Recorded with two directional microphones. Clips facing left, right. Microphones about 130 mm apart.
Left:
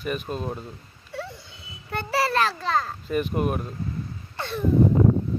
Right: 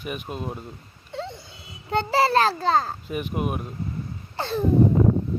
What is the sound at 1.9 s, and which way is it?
A child's voice, 25° right (ahead or behind).